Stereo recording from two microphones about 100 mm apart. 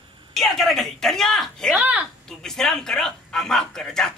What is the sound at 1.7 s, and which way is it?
Speech, 15° right (ahead or behind).